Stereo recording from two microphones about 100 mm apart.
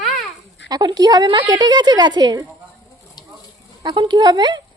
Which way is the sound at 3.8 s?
50° right (ahead or behind).